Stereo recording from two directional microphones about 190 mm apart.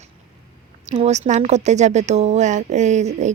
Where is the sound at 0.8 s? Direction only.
35° right (ahead or behind).